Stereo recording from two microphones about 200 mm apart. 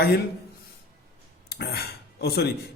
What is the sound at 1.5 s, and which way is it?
Speech, 55° left (ahead or behind).